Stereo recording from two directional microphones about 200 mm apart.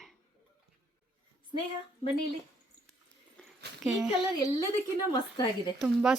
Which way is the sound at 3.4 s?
5° left (ahead or behind).